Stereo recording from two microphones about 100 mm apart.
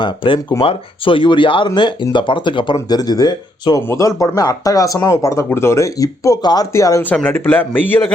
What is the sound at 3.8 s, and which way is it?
Speech, 25° left (ahead or behind).